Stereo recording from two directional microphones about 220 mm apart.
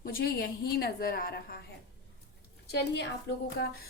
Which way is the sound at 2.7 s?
50° left (ahead or behind).